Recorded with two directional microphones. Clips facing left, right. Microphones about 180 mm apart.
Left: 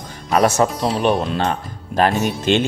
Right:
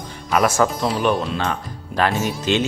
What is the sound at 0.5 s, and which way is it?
Speech, 20° left (ahead or behind).